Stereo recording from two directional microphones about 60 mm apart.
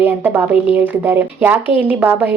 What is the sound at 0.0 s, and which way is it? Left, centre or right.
Speech, right.